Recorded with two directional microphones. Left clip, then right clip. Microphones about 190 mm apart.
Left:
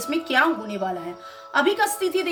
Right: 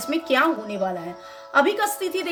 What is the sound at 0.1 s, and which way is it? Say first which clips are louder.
A woman's voice: even; 20° right (ahead or behind).